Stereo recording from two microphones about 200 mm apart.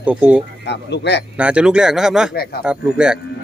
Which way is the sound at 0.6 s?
60° left (ahead or behind).